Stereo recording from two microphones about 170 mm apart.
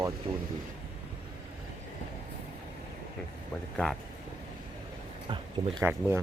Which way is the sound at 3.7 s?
5° left (ahead or behind).